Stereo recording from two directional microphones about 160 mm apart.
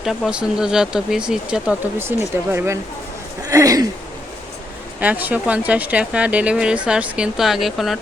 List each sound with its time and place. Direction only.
0.0 s speech: centre (ahead or behind); by 3.8 s 20° right (ahead or behind)
4.9 s speech: 10° right (ahead or behind)